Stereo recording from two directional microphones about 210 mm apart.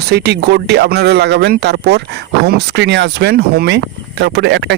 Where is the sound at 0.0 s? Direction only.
50° right (ahead or behind).